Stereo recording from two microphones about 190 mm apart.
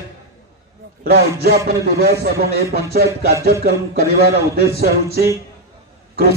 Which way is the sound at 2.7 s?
55° right (ahead or behind).